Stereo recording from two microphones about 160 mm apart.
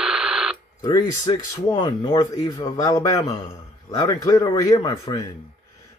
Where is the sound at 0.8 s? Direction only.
25° left (ahead or behind).